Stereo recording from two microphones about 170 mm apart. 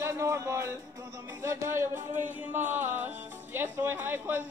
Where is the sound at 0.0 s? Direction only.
15° right (ahead or behind).